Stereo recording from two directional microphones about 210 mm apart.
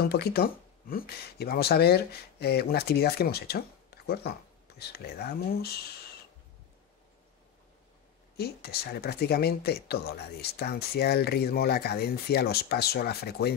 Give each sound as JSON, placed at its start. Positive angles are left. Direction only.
{"t": 0.0, "sound": "speech", "side_deg": 50}
{"t": 8.4, "sound": "speech", "side_deg": 50}